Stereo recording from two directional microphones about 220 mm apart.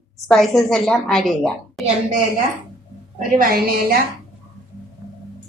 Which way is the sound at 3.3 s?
40° right (ahead or behind).